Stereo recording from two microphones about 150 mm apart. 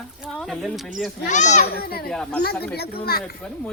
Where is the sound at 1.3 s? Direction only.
55° left (ahead or behind).